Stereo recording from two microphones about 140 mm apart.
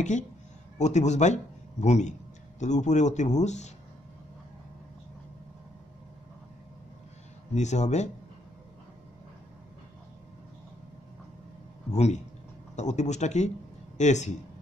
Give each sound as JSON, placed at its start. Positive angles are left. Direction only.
{"t": 0.7, "sound": "a man's voice", "side_deg": 55}
{"t": 7.5, "sound": "speech", "side_deg": 55}
{"t": 11.9, "sound": "speech", "side_deg": 55}